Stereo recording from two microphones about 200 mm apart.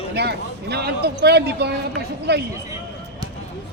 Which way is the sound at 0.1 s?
55° right (ahead or behind).